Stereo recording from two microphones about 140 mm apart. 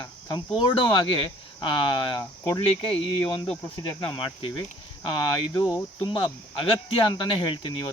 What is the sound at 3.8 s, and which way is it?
Speech, 35° left (ahead or behind).